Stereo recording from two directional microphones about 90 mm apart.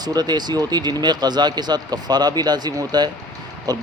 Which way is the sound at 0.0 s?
50° right (ahead or behind).